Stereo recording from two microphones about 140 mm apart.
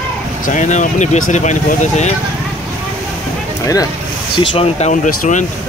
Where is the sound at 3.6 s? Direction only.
25° left (ahead or behind).